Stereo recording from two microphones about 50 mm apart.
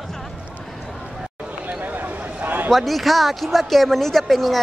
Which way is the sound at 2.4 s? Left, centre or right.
Right.